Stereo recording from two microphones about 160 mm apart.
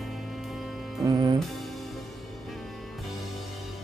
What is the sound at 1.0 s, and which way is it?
Music, 20° right (ahead or behind).